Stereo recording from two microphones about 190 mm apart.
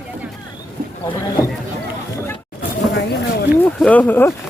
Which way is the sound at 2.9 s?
60° left (ahead or behind).